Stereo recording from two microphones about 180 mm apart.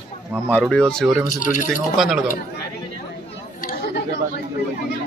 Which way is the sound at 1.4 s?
45° left (ahead or behind).